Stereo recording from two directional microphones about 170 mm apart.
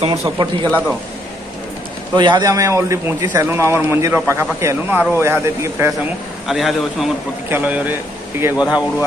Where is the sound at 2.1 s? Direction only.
25° right (ahead or behind).